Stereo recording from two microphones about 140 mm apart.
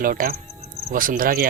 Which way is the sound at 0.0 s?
90° right.